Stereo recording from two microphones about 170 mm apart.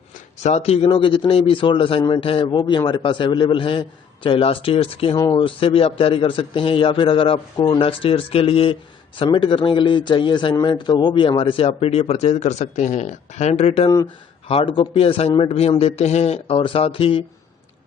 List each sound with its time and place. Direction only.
0.4 s speech: 40° left (ahead or behind)
5.1 s speech: 25° left (ahead or behind)